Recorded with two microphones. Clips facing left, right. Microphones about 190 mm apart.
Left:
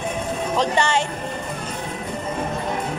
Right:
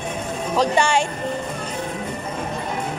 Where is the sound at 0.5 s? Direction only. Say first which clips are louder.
Right 2 dB; 10° right (ahead or behind).